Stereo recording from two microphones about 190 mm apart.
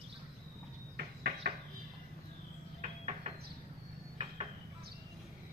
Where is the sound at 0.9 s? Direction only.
55° right (ahead or behind).